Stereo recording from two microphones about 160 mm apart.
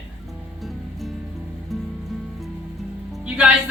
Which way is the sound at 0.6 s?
Centre (ahead or behind).